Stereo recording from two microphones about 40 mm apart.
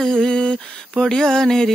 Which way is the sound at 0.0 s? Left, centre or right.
Centre.